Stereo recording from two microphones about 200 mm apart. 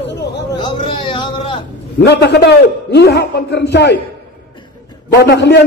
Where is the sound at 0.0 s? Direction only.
60° left (ahead or behind).